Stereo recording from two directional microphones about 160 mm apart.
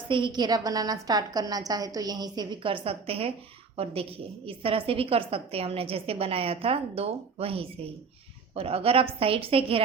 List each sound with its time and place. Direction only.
0.1 s a woman's voice: 30° right (ahead or behind)
4.4 s a woman's voice: 35° right (ahead or behind)